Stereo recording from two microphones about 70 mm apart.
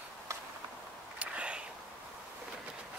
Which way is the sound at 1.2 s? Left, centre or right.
Centre.